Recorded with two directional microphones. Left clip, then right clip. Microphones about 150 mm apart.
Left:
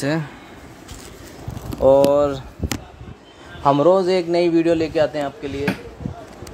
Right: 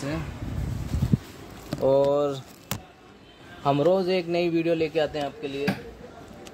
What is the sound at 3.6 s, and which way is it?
Speech, 25° left (ahead or behind).